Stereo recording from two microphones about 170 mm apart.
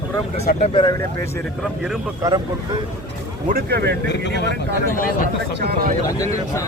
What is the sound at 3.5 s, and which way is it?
Speech, 70° right (ahead or behind).